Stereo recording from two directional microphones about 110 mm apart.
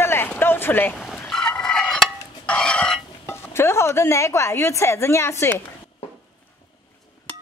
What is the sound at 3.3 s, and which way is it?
Speech, 25° left (ahead or behind).